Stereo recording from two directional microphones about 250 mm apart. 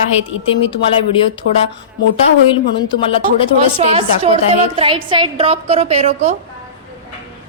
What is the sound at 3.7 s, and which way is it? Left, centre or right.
Female singing, right.